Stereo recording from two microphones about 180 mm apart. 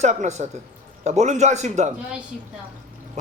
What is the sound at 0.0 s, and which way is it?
A man's voice, 40° right (ahead or behind).